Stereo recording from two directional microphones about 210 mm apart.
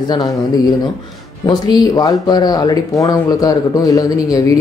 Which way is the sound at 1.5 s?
20° left (ahead or behind).